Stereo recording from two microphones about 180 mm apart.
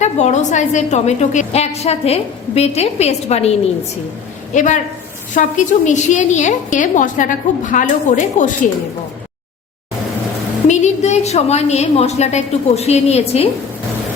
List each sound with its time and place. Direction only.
0.0 s a woman's voice: 40° left (ahead or behind)
4.5 s a woman's voice: 45° left (ahead or behind)
10.7 s a woman's voice: 40° left (ahead or behind)